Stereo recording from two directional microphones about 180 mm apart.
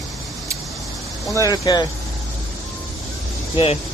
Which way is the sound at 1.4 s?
20° left (ahead or behind).